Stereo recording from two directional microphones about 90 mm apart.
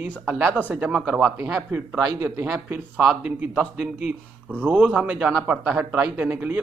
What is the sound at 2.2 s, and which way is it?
Speech, 30° right (ahead or behind).